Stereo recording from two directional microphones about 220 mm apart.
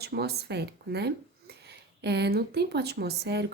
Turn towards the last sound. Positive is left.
turn(degrees=-50)  # may be behind; listen again after turning